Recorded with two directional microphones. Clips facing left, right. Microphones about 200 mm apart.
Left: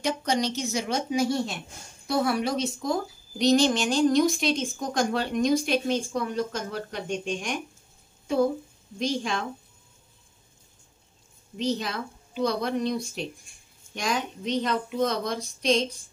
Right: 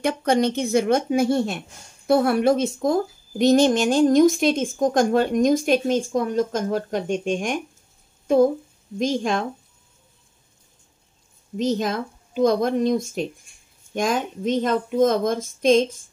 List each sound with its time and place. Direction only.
0.0 s a woman's voice: 55° right (ahead or behind)
8.9 s speech: 45° right (ahead or behind)
11.5 s speech: 45° right (ahead or behind)